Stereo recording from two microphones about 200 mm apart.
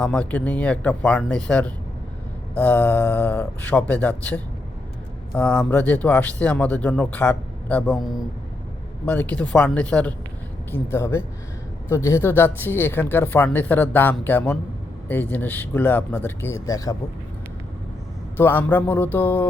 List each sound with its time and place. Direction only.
0.0 s speech: 5° left (ahead or behind)
18.3 s speech: 10° left (ahead or behind)